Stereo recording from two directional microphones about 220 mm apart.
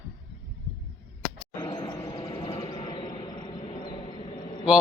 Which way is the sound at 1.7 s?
20° left (ahead or behind).